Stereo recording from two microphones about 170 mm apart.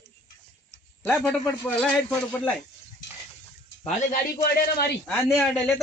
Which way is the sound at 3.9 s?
55° left (ahead or behind).